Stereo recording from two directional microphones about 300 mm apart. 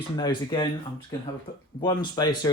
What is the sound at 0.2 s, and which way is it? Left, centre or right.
Speech, centre.